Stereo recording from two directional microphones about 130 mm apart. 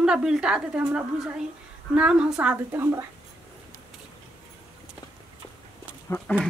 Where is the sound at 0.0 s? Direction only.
5° right (ahead or behind).